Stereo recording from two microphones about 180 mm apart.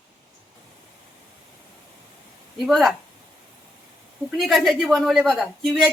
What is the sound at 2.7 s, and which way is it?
Speech, centre (ahead or behind).